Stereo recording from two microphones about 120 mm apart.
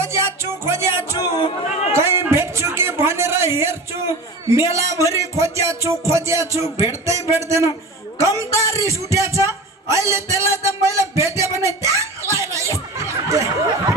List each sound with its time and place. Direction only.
0.0 s music: 20° right (ahead or behind)
1.1 s music: 35° left (ahead or behind)
2.0 s music: 20° right (ahead or behind)
8.2 s a sound: 25° right (ahead or behind)